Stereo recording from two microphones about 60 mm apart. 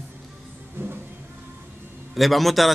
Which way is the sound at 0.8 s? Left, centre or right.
Right.